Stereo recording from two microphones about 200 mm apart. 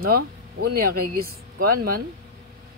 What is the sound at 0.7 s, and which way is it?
Speech, 45° right (ahead or behind).